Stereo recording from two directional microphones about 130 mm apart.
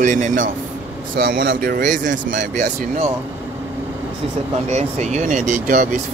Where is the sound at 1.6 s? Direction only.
85° right.